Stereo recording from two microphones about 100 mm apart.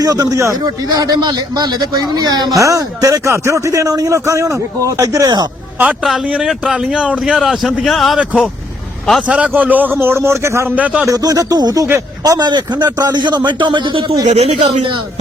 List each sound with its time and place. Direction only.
0.0 s a man's voice: 35° right (ahead or behind)
2.6 s a man's voice: 30° right (ahead or behind)
5.8 s speech: 15° right (ahead or behind); by 8.2 s centre (ahead or behind)
9.2 s a man's voice: 10° right (ahead or behind); by 10.7 s 30° right (ahead or behind)
10.8 s speech: 15° right (ahead or behind)
11.0 s a man's voice: 40° right (ahead or behind); by 14.2 s 60° right (ahead or behind)
14.3 s speech: 90° right